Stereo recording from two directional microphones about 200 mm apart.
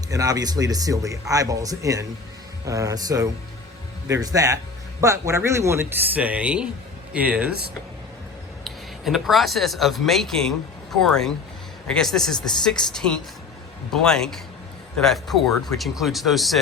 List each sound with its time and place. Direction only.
0.1 s speech: 15° right (ahead or behind)
8.6 s speech: centre (ahead or behind)